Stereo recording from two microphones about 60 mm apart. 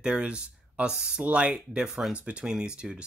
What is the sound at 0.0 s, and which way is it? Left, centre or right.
Speech, centre.